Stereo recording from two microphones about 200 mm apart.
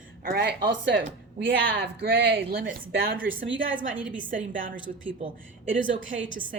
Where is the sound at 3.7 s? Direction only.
5° right (ahead or behind).